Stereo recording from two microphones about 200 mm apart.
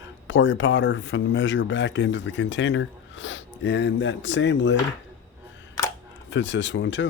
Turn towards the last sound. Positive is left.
turn(degrees=65)  # may be behind; listen again after turning